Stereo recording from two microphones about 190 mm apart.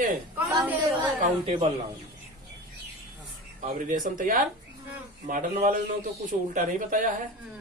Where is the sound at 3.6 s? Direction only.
45° right (ahead or behind).